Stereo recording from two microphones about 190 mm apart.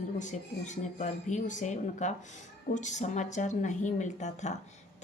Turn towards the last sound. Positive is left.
turn(degrees=40)  # may be behind; listen again after turning